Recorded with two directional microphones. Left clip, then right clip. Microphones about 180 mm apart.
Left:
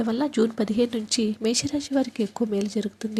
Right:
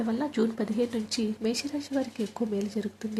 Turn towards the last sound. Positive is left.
turn(degrees=20)  # may be behind; listen again after turning